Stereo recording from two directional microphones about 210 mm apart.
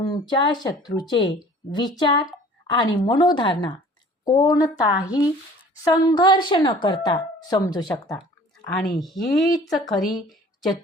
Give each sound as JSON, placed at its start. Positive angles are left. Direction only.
{"t": 0.0, "sound": "a woman's voice", "side_deg": 20}
{"t": 9.0, "sound": "speech", "side_deg": 0}